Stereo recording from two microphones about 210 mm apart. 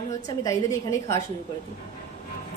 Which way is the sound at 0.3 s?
15° left (ahead or behind).